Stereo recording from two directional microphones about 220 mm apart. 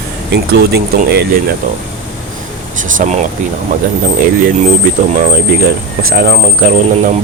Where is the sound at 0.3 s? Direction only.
45° right (ahead or behind).